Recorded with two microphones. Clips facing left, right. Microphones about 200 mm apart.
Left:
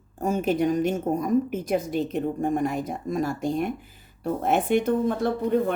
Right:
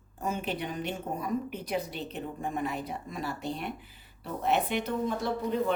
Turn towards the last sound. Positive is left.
turn(degrees=50)  # may be behind; listen again after turning